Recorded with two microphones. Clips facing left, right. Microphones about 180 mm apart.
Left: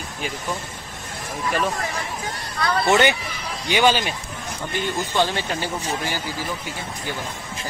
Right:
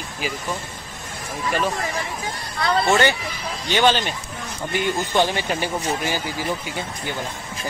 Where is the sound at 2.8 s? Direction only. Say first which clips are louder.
Left 3 dB; 20° left (ahead or behind).